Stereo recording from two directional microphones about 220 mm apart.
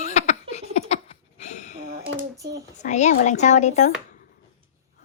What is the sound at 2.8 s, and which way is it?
A woman's voice, 35° left (ahead or behind).